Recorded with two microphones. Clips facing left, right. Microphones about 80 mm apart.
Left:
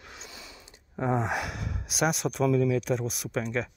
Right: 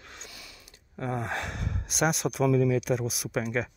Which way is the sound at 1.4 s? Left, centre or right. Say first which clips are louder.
Even; centre.